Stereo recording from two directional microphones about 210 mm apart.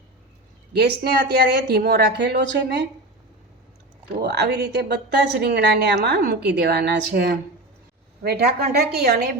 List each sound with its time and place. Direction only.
0.7 s speech: 50° right (ahead or behind)
4.1 s speech: 55° right (ahead or behind)